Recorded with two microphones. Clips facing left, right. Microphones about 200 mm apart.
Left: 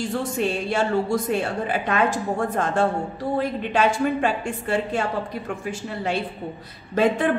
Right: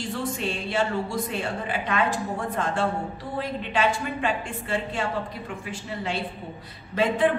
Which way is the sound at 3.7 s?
45° left (ahead or behind).